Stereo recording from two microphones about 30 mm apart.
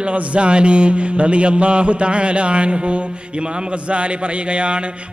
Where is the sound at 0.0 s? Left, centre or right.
Right.